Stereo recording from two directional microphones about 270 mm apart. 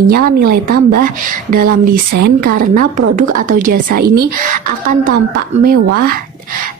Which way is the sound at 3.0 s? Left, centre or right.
Right.